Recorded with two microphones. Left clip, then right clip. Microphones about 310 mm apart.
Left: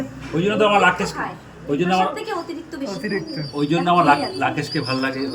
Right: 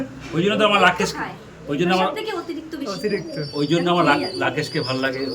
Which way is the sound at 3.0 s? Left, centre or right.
Centre.